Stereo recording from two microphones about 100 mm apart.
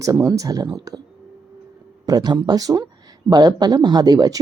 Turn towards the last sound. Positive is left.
turn(degrees=-40)  # may be behind; listen again after turning